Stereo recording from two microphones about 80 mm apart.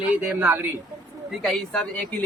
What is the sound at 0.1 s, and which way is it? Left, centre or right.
Speech, right.